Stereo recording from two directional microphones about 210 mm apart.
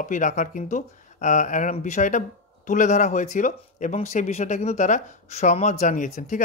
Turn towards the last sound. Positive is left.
turn(degrees=35)  # may be behind; listen again after turning